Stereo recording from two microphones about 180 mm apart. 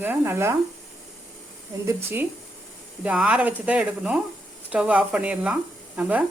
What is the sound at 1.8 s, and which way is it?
Speech, 10° right (ahead or behind).